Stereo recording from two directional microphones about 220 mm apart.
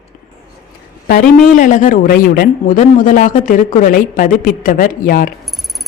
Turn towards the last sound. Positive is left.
turn(degrees=40)  # may be behind; listen again after turning